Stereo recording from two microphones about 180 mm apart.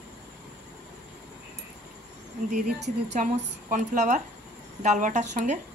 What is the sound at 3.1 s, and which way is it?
Speech, 45° right (ahead or behind).